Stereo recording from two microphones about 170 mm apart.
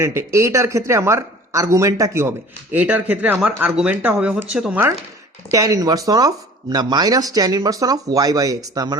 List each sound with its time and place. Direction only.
0.0 s a man's voice: 15° right (ahead or behind)